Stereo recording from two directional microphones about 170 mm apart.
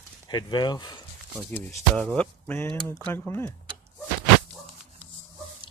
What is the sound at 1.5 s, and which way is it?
Speech, 5° left (ahead or behind).